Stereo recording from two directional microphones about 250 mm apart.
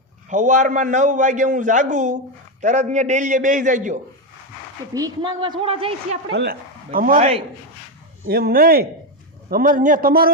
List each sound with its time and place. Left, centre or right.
0.3 s a man's voice: right
4.9 s a man's voice: centre
6.3 s a man's voice: right
8.3 s a man's voice: right